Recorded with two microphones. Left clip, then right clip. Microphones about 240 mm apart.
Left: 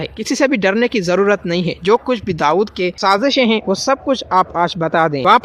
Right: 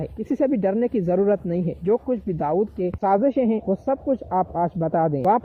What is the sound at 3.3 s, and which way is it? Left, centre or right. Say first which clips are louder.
Speech: left 8 dB; left.